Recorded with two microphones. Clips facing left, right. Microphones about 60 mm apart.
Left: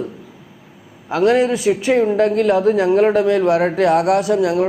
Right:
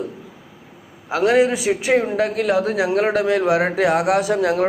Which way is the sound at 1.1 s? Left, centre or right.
Centre.